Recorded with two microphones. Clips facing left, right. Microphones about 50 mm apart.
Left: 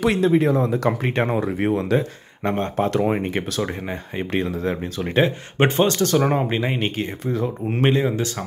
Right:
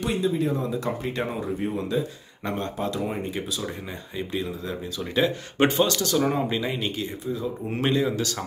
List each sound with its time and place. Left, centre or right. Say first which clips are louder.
0.1 s speech: left 3 dB; left
2.4 s speech: left 6 dB; left
2.7 s speech: left 8 dB; left